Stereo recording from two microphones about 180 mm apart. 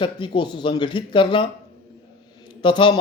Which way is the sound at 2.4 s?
25° left (ahead or behind).